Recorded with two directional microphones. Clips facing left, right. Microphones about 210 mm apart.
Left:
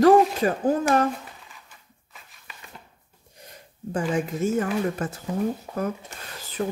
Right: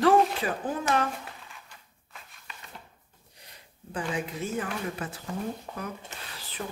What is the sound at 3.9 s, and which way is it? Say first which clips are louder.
Speech: left 7 dB; 45° left (ahead or behind).